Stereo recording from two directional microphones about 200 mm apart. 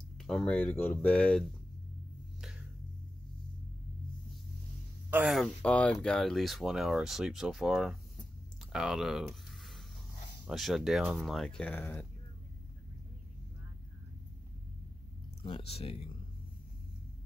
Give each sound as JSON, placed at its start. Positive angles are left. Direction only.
{"t": 0.2, "sound": "speech", "side_deg": 0}
{"t": 5.1, "sound": "speech", "side_deg": 0}
{"t": 15.4, "sound": "speech", "side_deg": 25}